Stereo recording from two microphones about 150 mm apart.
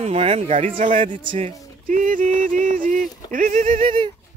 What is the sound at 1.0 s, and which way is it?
Speech, 35° right (ahead or behind).